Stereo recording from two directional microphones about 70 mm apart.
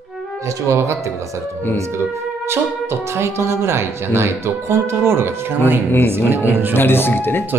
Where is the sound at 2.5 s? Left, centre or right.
Right.